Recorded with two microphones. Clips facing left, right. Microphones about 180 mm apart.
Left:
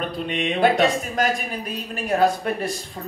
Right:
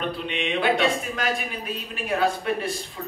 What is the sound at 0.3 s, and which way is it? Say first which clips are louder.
Speech: left 4 dB; 40° left (ahead or behind).